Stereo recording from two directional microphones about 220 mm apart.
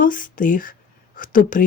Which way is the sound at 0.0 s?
40° left (ahead or behind).